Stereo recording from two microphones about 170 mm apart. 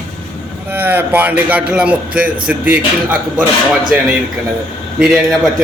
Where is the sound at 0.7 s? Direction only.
10° right (ahead or behind).